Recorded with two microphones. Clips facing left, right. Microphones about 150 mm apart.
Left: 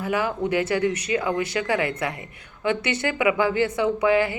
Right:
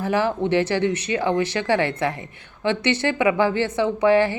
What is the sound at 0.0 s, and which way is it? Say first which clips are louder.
Speech: right 3 dB; 35° right (ahead or behind).